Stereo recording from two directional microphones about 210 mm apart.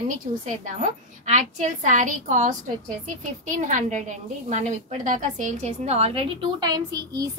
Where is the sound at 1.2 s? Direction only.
35° right (ahead or behind).